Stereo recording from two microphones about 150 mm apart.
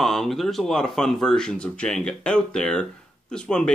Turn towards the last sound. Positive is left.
turn(degrees=5)  # may be behind; listen again after turning